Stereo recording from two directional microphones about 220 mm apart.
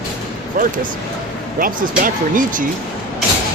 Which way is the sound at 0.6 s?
40° right (ahead or behind).